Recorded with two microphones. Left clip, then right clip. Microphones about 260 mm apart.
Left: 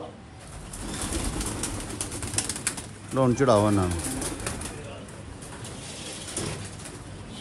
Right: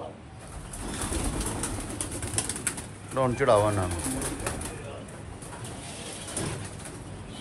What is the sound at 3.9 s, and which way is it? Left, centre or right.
Speech, centre.